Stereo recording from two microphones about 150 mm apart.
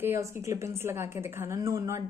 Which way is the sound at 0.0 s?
20° right (ahead or behind).